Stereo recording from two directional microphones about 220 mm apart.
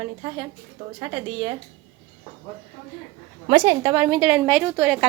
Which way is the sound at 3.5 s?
15° right (ahead or behind).